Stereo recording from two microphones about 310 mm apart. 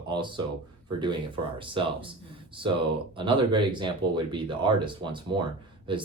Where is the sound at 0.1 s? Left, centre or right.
Centre.